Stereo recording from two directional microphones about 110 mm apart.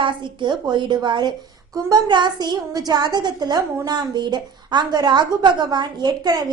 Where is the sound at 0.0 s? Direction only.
45° right (ahead or behind).